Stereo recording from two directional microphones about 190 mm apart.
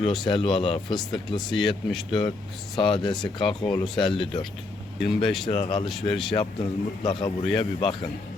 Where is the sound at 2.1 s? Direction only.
25° left (ahead or behind).